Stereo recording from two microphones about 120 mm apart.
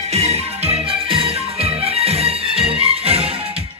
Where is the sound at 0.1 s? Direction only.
60° right (ahead or behind).